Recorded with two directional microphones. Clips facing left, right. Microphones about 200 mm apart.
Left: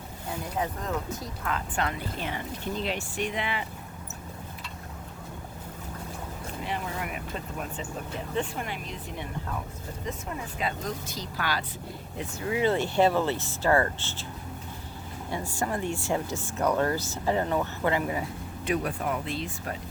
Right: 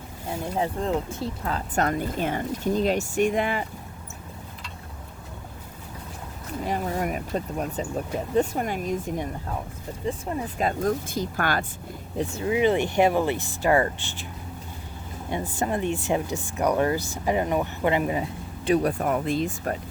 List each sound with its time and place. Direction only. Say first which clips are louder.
0.5 s speech: right 6 dB; 30° right (ahead or behind); by 3.7 s 45° right (ahead or behind)
6.7 s speech: right 7 dB; 40° right (ahead or behind)
12.1 s speech: right 6 dB; 25° right (ahead or behind)
15.3 s speech: right 4 dB; 20° right (ahead or behind); by 19.7 s 45° right (ahead or behind)